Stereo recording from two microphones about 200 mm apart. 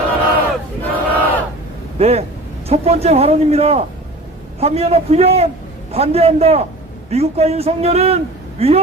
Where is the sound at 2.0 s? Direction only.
30° right (ahead or behind).